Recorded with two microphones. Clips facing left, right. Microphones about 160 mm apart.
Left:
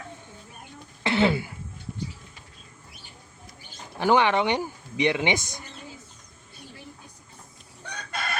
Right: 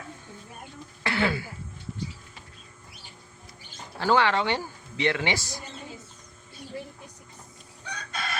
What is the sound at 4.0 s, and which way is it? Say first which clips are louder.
Speech: left 2 dB; 20° left (ahead or behind).